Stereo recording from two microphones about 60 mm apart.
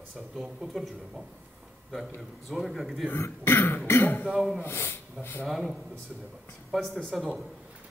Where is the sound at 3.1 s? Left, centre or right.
Left.